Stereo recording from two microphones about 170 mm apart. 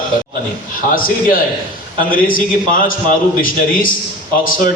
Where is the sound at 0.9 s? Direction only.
55° left (ahead or behind).